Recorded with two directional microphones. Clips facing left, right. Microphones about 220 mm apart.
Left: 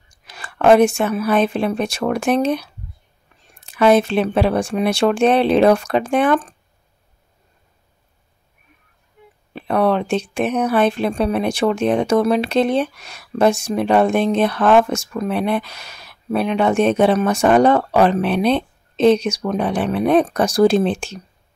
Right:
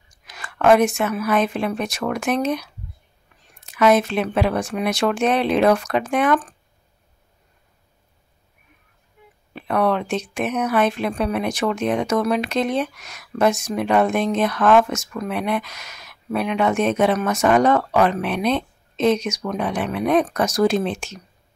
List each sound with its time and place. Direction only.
0.3 s speech: 30° left (ahead or behind)
3.7 s speech: 30° left (ahead or behind)
9.5 s speech: 30° left (ahead or behind)